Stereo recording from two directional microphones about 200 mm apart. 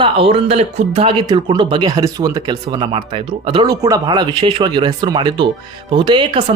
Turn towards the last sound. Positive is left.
turn(degrees=-25)  # may be behind; listen again after turning